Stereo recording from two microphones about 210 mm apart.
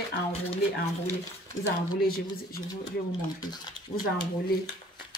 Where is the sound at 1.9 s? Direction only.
45° left (ahead or behind).